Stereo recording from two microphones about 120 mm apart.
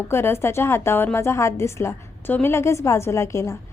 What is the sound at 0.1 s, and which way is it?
A woman's voice, 20° left (ahead or behind).